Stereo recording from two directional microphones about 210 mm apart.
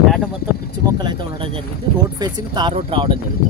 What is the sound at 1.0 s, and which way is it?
Speech, 25° right (ahead or behind).